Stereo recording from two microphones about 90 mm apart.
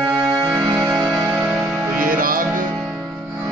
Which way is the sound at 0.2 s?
45° right (ahead or behind).